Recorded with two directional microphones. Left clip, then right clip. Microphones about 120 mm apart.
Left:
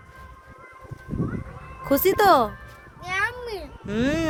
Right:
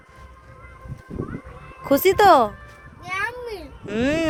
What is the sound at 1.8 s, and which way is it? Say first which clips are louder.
Speech: right 3 dB; 20° right (ahead or behind).